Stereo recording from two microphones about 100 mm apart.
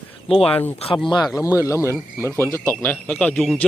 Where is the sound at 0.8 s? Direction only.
90° left.